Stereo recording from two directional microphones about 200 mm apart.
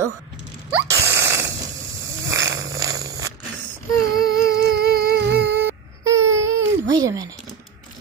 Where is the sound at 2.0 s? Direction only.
15° right (ahead or behind).